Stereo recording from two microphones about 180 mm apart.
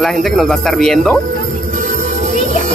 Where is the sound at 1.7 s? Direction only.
45° right (ahead or behind).